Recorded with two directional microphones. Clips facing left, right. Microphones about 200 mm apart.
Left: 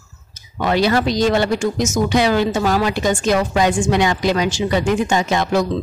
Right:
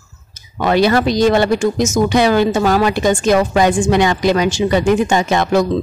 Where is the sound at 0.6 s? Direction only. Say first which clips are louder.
Right 3 dB; 60° right (ahead or behind).